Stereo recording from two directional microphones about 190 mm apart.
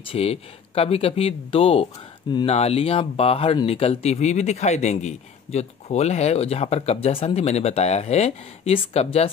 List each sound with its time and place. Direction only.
0.1 s speech: 30° left (ahead or behind)